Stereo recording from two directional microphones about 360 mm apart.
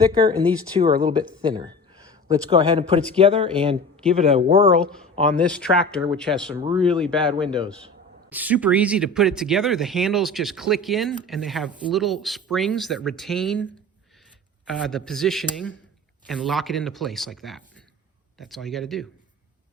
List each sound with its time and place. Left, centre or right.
0.0 s speech: centre
4.8 s speech: centre
14.7 s speech: centre